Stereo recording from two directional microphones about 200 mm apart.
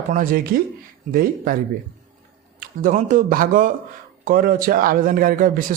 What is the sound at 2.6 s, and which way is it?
A man's voice, 40° right (ahead or behind).